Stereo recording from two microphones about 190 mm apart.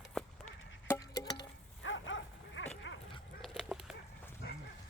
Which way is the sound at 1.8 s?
80° left.